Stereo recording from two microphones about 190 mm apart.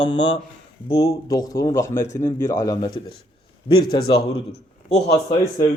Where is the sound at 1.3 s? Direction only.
20° left (ahead or behind).